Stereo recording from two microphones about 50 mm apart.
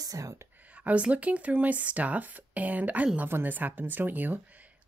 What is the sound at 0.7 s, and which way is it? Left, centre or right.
Speech, right.